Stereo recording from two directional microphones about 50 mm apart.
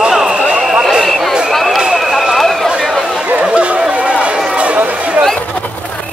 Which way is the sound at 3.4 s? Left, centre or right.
Right.